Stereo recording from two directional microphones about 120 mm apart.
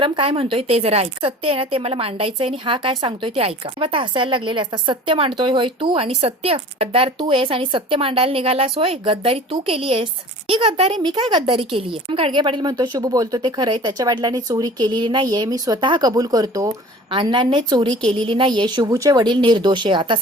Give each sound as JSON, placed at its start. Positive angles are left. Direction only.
{"t": 0.0, "sound": "speech", "side_deg": -50}
{"t": 17.1, "sound": "speech", "side_deg": -40}